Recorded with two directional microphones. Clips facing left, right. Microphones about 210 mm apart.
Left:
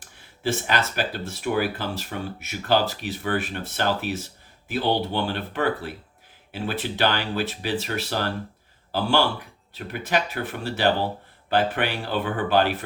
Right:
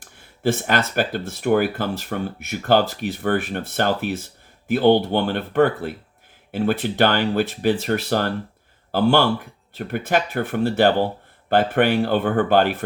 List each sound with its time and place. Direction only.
0.4 s speech: 55° right (ahead or behind)